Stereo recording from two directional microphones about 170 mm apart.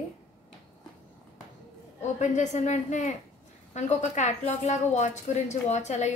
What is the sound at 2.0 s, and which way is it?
A woman's voice, 45° left (ahead or behind).